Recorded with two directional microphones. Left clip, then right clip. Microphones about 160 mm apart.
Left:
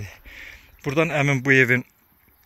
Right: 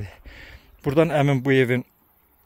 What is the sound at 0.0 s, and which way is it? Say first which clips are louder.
Speech: left 3 dB; 35° right (ahead or behind).